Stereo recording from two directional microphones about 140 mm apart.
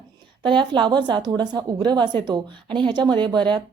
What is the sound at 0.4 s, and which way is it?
A woman's voice, 35° right (ahead or behind).